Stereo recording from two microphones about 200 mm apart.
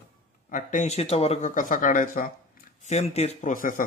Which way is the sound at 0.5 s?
40° left (ahead or behind).